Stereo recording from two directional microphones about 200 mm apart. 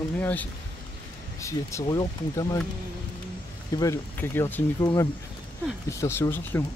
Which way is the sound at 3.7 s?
15° left (ahead or behind).